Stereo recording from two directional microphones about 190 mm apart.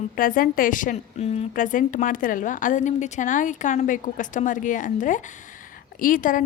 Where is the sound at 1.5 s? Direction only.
45° left (ahead or behind).